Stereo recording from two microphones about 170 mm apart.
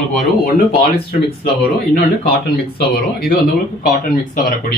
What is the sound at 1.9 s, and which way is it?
Speech, 70° left (ahead or behind).